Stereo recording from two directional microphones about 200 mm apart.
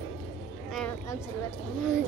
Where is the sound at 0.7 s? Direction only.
5° left (ahead or behind).